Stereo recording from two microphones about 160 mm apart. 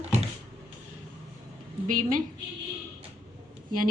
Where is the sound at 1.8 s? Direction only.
55° right (ahead or behind).